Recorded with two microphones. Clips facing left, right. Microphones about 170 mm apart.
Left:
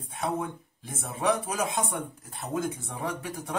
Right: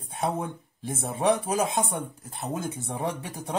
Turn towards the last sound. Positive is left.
turn(degrees=-25)  # may be behind; listen again after turning